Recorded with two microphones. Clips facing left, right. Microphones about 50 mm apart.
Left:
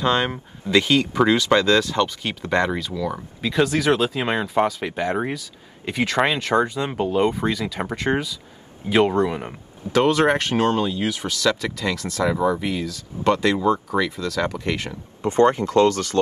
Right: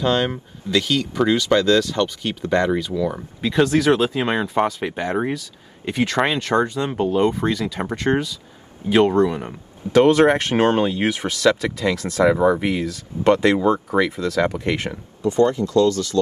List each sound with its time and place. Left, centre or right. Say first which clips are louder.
0.0 s speech: right 1 dB; left
2.7 s speech: right 4 dB; centre
10.0 s speech: right 1 dB; right
15.2 s speech: even; left